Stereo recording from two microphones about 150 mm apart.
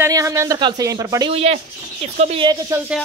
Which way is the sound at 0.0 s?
20° right (ahead or behind).